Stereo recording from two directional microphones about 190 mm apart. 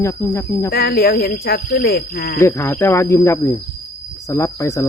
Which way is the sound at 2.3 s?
15° left (ahead or behind).